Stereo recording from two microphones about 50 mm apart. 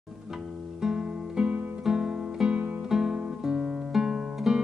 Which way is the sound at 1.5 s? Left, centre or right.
Right.